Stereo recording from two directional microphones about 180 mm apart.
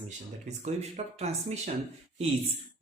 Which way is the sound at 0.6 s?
40° right (ahead or behind).